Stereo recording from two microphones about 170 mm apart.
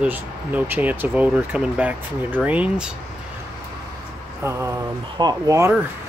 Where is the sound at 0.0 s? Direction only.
10° right (ahead or behind).